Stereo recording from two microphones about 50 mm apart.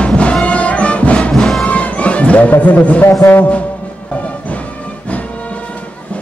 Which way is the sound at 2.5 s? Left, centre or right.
Left.